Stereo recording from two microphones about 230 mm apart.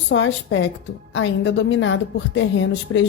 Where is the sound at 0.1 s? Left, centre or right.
Left.